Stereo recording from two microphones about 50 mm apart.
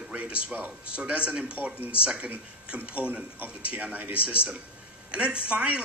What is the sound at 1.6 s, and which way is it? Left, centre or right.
Speech, right.